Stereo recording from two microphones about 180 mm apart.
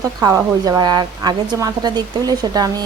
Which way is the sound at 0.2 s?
20° right (ahead or behind).